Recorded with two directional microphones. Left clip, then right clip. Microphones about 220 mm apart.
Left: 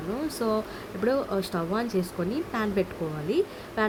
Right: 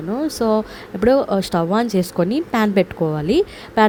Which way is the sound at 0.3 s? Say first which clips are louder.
Right 10 dB; 30° right (ahead or behind).